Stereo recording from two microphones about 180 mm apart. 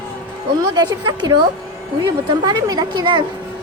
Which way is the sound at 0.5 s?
25° right (ahead or behind).